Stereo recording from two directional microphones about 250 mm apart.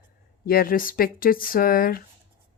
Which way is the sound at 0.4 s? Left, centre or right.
Left.